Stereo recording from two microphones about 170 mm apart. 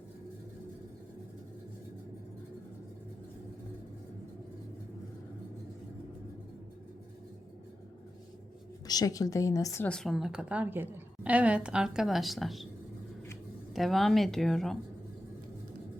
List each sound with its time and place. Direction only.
8.9 s a woman's voice: 20° left (ahead or behind)
9.9 s a woman's voice: centre (ahead or behind)
13.7 s a woman's voice: centre (ahead or behind)